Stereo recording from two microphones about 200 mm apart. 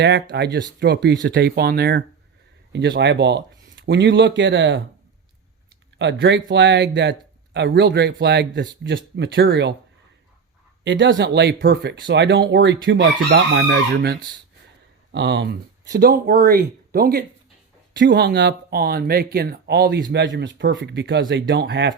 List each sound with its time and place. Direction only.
0.0 s speech: 60° right (ahead or behind)
6.0 s speech: 65° right (ahead or behind)
10.8 s speech: 65° right (ahead or behind); by 17.2 s 50° right (ahead or behind)
17.9 s speech: 60° right (ahead or behind)